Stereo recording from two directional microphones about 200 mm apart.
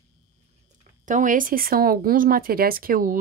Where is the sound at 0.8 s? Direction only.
40° right (ahead or behind).